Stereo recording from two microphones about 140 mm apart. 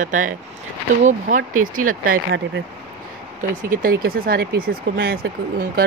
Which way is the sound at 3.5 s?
75° right (ahead or behind).